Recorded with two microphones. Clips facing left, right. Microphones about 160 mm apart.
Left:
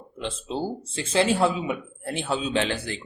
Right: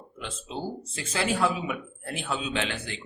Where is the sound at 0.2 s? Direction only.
30° left (ahead or behind).